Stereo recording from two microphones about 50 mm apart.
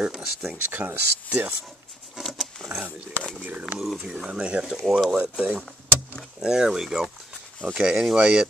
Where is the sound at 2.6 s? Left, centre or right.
Centre.